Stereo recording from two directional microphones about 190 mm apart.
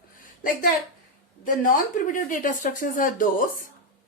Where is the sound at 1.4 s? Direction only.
45° left (ahead or behind).